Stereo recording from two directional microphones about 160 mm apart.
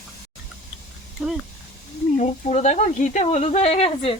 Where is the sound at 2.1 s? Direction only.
45° left (ahead or behind).